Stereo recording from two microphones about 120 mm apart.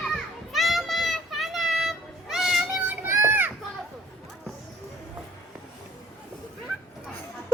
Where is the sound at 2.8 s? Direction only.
20° right (ahead or behind).